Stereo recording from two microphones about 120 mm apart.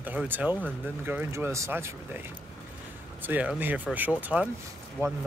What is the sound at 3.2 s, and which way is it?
Speech, 15° right (ahead or behind).